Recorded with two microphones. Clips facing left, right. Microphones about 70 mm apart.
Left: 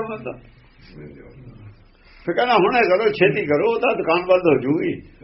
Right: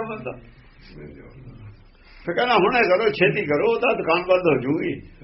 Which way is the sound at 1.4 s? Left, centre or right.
Left.